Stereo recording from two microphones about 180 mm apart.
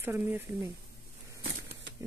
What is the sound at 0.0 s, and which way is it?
Speech, 10° right (ahead or behind).